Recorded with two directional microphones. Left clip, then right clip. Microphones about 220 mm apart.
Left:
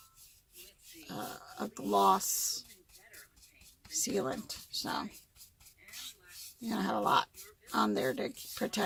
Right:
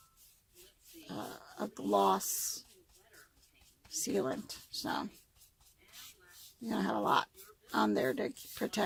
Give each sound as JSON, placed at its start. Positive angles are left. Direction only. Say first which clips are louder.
{"t": 1.0, "sound": "a sound", "louder": "left 2 dB", "side_deg": -25}
{"t": 4.1, "sound": "speech", "louder": "right 2 dB", "side_deg": -25}
{"t": 6.7, "sound": "speech", "louder": "left 1 dB", "side_deg": -25}